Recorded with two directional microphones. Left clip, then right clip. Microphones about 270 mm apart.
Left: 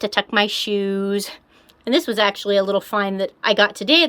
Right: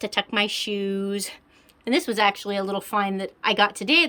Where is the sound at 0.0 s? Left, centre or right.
Centre.